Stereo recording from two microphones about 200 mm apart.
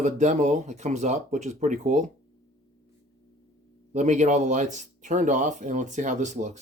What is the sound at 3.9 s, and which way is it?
Speech, 35° right (ahead or behind).